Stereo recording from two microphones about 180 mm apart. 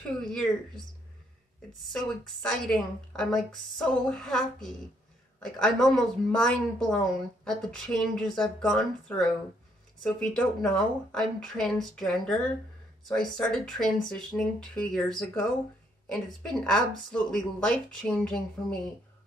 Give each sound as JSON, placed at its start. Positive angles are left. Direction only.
{"t": 0.3, "sound": "a woman's voice", "side_deg": 5}